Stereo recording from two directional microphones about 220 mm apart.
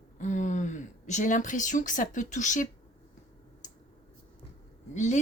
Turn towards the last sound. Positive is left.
turn(degrees=35)  # may be behind; listen again after turning